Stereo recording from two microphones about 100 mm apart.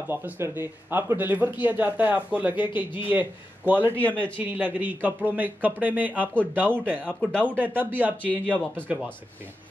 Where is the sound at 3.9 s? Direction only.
15° left (ahead or behind).